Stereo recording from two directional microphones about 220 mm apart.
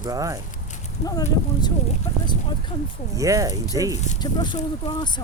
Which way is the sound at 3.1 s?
15° right (ahead or behind).